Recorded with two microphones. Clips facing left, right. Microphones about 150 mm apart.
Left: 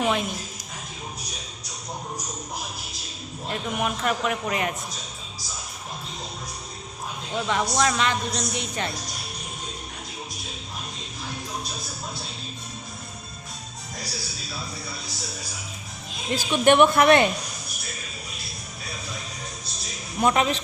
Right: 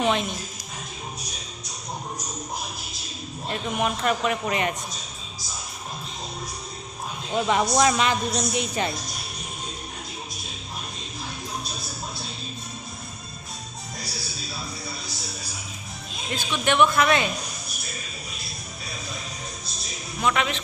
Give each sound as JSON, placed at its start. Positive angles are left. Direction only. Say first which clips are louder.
{"t": 0.0, "sound": "music", "louder": "right 1 dB", "side_deg": 5}
{"t": 3.5, "sound": "a man's voice", "louder": "right 1 dB", "side_deg": 0}
{"t": 7.4, "sound": "a woman's voice", "louder": "right 3 dB", "side_deg": -5}
{"t": 16.3, "sound": "a man's voice", "louder": "left 6 dB", "side_deg": 50}
{"t": 20.2, "sound": "a man's voice", "louder": "left 3 dB", "side_deg": 35}